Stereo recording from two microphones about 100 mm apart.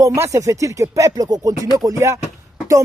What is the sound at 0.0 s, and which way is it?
Speech, 30° right (ahead or behind).